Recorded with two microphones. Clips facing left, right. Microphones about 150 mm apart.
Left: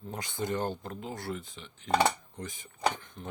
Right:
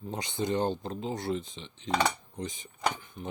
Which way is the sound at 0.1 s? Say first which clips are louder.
Right 3 dB; 20° right (ahead or behind).